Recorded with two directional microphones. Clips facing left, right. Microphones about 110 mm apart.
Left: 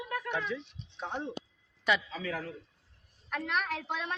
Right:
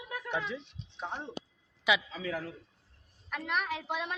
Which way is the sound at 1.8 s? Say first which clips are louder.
Even; 5° right (ahead or behind).